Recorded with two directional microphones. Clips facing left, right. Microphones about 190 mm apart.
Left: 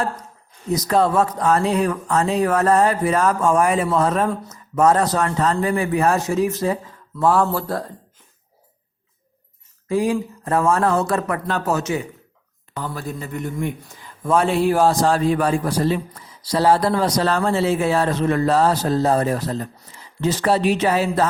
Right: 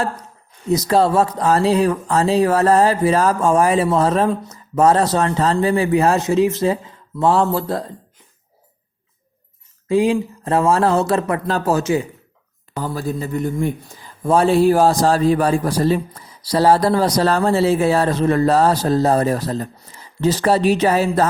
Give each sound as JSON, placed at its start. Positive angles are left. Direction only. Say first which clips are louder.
{"t": 0.7, "sound": "a man's voice", "louder": "right 3 dB", "side_deg": -30}
{"t": 9.9, "sound": "a man's voice", "louder": "right 4 dB", "side_deg": -25}